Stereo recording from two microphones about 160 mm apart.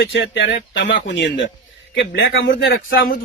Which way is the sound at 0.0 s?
90° left.